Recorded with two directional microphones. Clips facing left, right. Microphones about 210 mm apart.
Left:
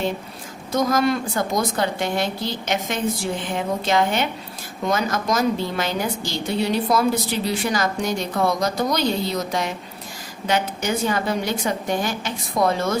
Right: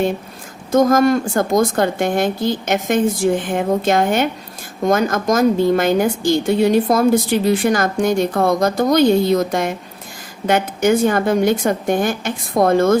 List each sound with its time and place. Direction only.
0.7 s a woman's voice: 50° right (ahead or behind)